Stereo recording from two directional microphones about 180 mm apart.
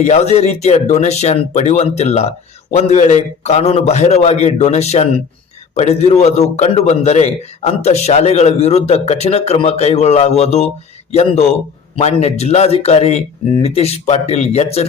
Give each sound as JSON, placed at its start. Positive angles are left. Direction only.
{"t": 0.0, "sound": "a man's voice", "side_deg": 35}